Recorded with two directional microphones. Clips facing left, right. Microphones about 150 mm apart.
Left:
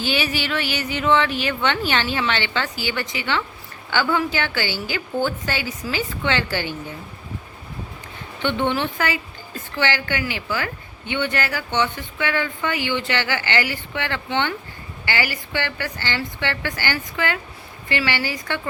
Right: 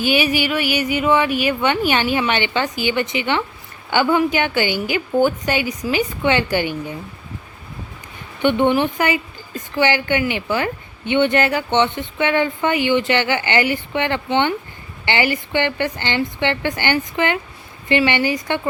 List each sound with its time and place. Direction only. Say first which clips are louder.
0.0 s speech: right 6 dB; 10° right (ahead or behind)
8.4 s a woman's voice: right 6 dB; 15° right (ahead or behind)